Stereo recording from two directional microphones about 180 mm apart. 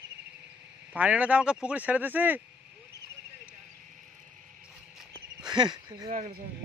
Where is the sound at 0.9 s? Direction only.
10° right (ahead or behind).